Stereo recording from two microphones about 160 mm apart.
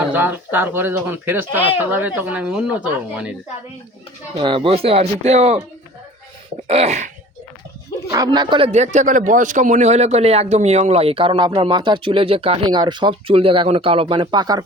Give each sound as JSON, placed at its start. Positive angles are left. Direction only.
{"t": 0.1, "sound": "speech", "side_deg": -10}
{"t": 4.4, "sound": "a man's voice", "side_deg": -35}
{"t": 6.7, "sound": "a man's voice", "side_deg": -40}
{"t": 8.1, "sound": "a man's voice", "side_deg": -25}